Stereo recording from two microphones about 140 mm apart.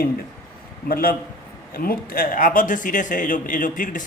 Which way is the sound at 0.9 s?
90° left.